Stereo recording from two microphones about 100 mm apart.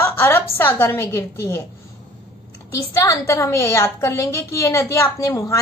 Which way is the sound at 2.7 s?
30° left (ahead or behind).